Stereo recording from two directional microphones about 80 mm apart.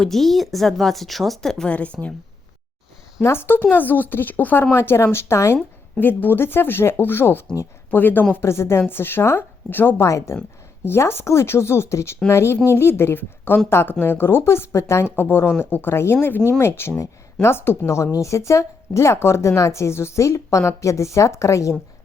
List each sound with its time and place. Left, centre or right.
0.0 s a woman's voice: centre
3.2 s a woman's voice: left
10.1 s a woman's voice: left